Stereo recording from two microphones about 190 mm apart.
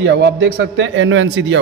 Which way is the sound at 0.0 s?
70° right (ahead or behind).